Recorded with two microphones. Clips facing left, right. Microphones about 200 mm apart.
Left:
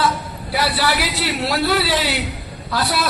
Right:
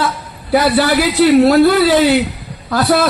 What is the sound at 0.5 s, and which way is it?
A man's voice, 50° right (ahead or behind).